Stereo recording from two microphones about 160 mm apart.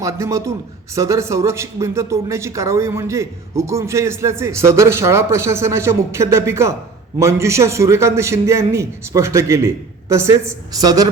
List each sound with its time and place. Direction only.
0.0 s a man's voice: 20° right (ahead or behind)